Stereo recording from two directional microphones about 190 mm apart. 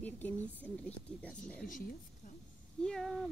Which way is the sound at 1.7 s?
45° left (ahead or behind).